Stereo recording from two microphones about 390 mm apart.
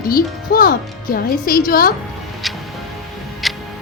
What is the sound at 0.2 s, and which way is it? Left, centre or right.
Speech, left.